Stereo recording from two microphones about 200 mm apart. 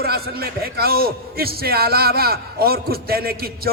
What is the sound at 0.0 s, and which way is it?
A man's voice, 50° right (ahead or behind).